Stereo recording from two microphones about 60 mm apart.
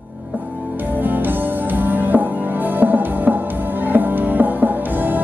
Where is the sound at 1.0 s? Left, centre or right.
Right.